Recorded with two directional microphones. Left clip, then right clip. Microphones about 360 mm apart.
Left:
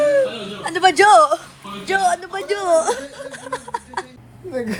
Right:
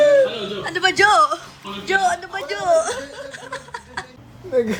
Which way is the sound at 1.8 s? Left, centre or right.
Centre.